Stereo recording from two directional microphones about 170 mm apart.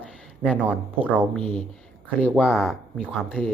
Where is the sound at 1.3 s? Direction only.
5° left (ahead or behind).